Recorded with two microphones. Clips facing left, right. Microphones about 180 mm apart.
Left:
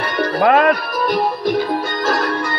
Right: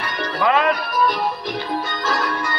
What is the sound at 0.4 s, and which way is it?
Speech, 50° left (ahead or behind).